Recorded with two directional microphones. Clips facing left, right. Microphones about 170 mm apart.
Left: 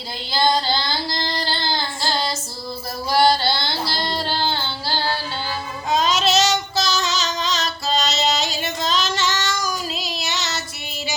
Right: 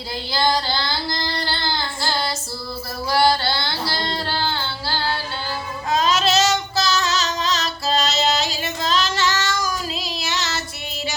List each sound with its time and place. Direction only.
3.1 s a sound: 20° left (ahead or behind)
4.2 s music: 20° left (ahead or behind)
5.9 s child singing: centre (ahead or behind)